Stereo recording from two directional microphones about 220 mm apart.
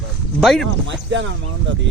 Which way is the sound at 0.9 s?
55° right (ahead or behind).